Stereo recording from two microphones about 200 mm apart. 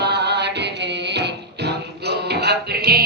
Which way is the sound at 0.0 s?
55° right (ahead or behind).